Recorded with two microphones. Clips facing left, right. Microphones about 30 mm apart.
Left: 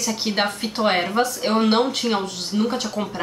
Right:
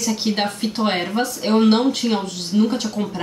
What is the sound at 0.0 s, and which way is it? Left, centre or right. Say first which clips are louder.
Speech: right 1 dB; centre.